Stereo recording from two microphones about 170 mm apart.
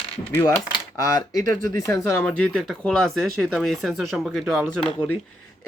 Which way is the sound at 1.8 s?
15° left (ahead or behind).